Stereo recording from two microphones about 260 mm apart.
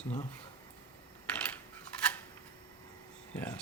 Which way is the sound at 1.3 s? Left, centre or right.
Centre.